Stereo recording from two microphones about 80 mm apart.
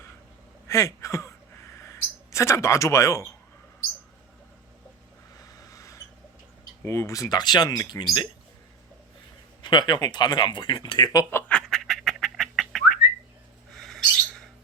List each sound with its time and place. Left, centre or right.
0.7 s speech: left
5.5 s a sound: left
6.8 s speech: left
9.6 s speech: left
11.4 s bird: centre